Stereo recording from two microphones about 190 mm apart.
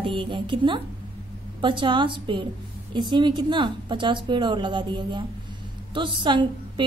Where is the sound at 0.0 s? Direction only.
25° right (ahead or behind).